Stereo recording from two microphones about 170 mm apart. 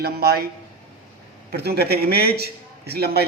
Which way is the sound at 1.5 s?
70° right (ahead or behind).